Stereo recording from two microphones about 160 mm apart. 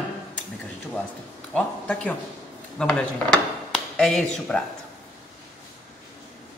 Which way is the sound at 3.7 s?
Centre (ahead or behind).